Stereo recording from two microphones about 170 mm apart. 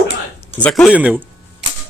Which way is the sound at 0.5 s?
5° left (ahead or behind).